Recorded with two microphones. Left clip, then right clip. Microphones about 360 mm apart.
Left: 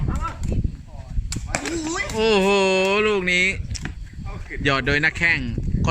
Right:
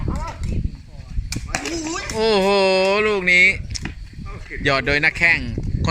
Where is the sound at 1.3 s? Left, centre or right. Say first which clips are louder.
Right 1 dB; centre.